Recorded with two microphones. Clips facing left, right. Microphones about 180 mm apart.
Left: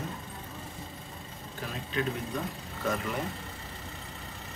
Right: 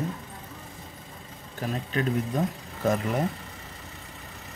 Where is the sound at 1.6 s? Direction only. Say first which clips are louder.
Right 5 dB; 45° right (ahead or behind).